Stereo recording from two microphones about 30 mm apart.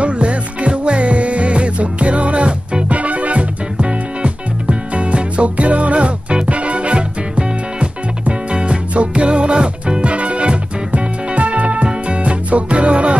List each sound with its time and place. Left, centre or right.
0.0 s music: right
10.1 s music: right
11.0 s music: right